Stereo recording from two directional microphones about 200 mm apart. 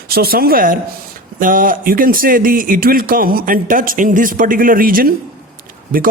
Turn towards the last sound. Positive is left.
turn(degrees=-45)  # may be behind; listen again after turning